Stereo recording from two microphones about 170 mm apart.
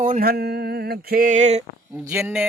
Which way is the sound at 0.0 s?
55° right (ahead or behind).